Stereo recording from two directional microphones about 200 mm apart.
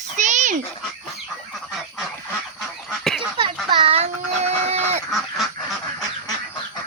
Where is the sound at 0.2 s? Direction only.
35° right (ahead or behind).